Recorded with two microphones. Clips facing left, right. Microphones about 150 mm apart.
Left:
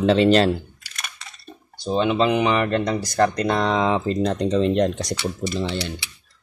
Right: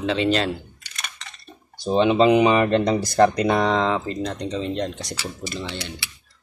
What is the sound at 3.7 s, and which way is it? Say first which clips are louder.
Speech: left 1 dB; 15° left (ahead or behind).